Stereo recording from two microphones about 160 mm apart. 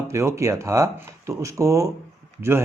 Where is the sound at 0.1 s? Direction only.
15° right (ahead or behind).